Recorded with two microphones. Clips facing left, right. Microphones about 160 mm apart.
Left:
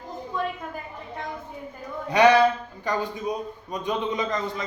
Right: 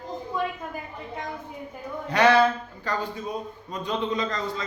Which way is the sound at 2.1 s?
15° left (ahead or behind).